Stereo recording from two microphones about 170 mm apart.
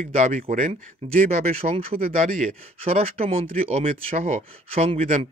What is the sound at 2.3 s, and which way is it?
Speech, 45° right (ahead or behind).